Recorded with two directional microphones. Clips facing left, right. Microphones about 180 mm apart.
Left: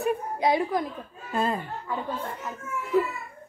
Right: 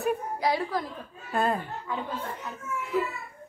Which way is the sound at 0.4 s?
20° left (ahead or behind).